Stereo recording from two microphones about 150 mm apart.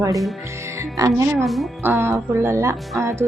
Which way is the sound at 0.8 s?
20° right (ahead or behind).